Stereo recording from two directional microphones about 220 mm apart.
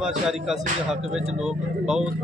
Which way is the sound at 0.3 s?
Centre (ahead or behind).